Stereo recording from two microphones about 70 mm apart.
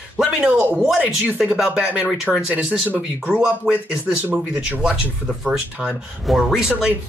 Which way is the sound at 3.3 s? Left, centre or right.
Centre.